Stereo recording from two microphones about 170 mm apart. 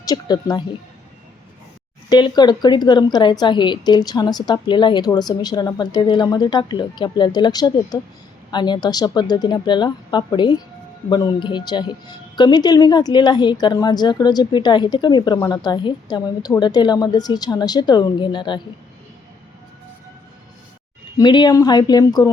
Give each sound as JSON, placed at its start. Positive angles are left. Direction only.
{"t": 0.0, "sound": "a woman's voice", "side_deg": 20}
{"t": 2.0, "sound": "a woman's voice", "side_deg": 25}
{"t": 21.2, "sound": "a woman's voice", "side_deg": 25}